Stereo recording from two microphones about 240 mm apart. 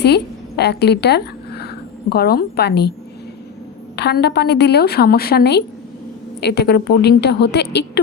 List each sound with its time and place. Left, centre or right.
0.0 s a woman's voice: left
3.9 s a woman's voice: left